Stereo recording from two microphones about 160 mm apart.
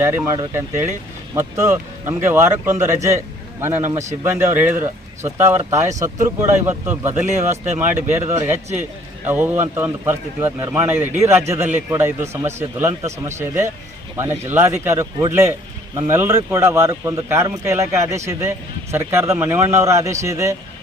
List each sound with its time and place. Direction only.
0.0 s a man's voice: 15° right (ahead or behind)
7.3 s speech: 50° right (ahead or behind)
8.2 s a man's voice: 15° right (ahead or behind)